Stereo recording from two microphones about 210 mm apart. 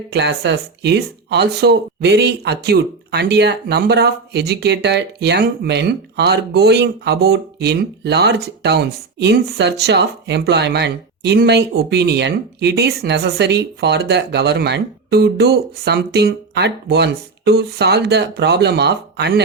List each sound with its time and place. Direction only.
0.1 s speech: 55° right (ahead or behind)